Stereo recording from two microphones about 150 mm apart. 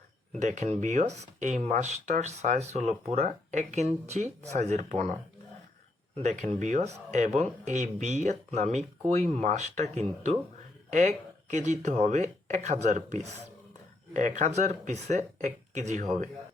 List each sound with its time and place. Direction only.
0.3 s speech: 55° right (ahead or behind)
6.1 s speech: 45° right (ahead or behind)
11.5 s speech: 50° right (ahead or behind)